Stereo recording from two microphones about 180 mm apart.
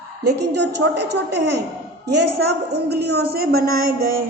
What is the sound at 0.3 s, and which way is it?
Speech, 70° right (ahead or behind).